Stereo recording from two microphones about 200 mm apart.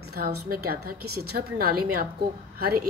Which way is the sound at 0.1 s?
50° right (ahead or behind).